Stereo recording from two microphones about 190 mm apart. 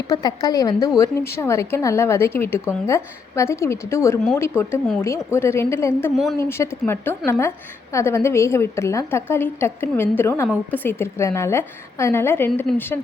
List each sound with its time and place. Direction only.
0.1 s a woman's voice: 20° left (ahead or behind)
6.1 s a woman's voice: centre (ahead or behind)
6.5 s a woman's voice: 15° left (ahead or behind)